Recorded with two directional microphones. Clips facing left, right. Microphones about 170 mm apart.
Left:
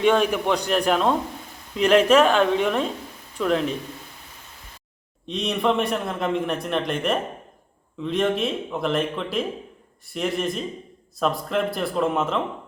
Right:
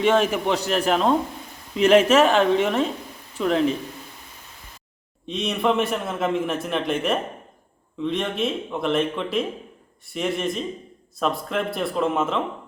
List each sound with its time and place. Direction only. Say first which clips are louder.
0.0 s a man's voice: even; 5° right (ahead or behind)
5.2 s a man's voice: even; centre (ahead or behind)